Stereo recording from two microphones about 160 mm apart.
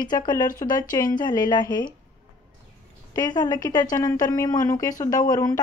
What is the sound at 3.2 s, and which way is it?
Speech, 25° left (ahead or behind).